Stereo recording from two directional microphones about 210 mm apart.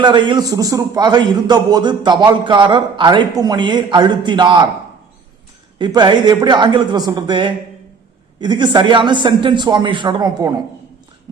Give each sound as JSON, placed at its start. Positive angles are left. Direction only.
{"t": 0.0, "sound": "a man's voice", "side_deg": -20}
{"t": 5.8, "sound": "a man's voice", "side_deg": -20}